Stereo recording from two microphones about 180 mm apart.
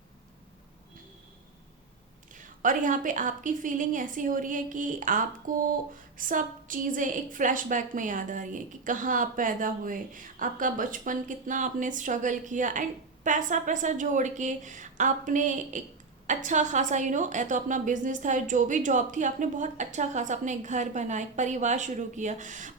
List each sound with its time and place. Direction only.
2.3 s a woman's voice: 45° right (ahead or behind)